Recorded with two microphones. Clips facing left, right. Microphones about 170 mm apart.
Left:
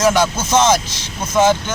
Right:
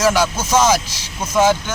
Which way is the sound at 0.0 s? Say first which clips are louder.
Left 1 dB; 10° right (ahead or behind).